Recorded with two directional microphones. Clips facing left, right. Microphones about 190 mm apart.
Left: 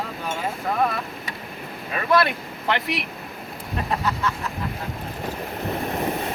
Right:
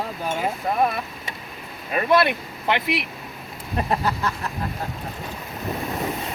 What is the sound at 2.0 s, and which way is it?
Speech, 20° right (ahead or behind).